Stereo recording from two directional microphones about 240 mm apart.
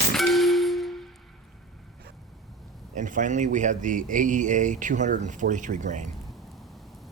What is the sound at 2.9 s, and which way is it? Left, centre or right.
Speech, right.